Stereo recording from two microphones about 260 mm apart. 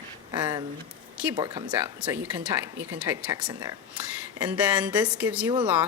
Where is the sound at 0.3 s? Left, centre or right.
Centre.